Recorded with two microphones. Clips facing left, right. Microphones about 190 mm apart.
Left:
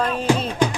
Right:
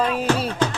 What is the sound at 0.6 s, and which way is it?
Music, 15° left (ahead or behind).